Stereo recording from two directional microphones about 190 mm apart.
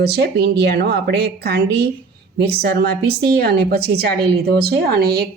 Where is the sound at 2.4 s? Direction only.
55° right (ahead or behind).